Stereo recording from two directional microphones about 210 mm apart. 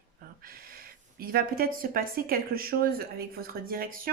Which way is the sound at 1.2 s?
45° right (ahead or behind).